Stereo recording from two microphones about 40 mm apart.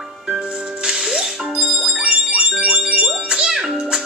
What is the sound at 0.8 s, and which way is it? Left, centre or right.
Music, centre.